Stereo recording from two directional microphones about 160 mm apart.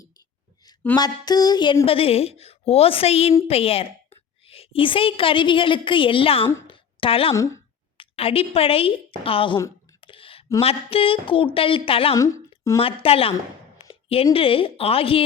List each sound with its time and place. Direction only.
0.9 s a woman's voice: 25° left (ahead or behind)
7.3 s speech: 20° left (ahead or behind)
7.9 s a woman's voice: 35° left (ahead or behind)
10.0 s a sound: 35° left (ahead or behind)
10.6 s speech: 35° left (ahead or behind)
12.1 s a woman's voice: 20° left (ahead or behind)
12.8 s speech: 35° left (ahead or behind)
14.3 s speech: 35° left (ahead or behind)